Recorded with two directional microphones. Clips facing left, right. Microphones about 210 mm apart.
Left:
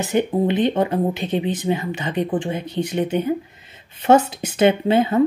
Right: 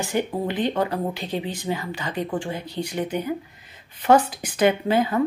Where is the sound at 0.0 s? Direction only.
20° left (ahead or behind).